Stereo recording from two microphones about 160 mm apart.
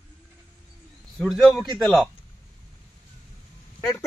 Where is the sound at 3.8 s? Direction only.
15° left (ahead or behind).